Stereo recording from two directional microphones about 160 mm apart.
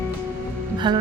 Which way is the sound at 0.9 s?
30° right (ahead or behind).